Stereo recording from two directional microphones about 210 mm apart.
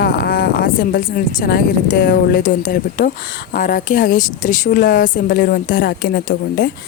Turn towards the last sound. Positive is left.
turn(degrees=45)  # may be behind; listen again after turning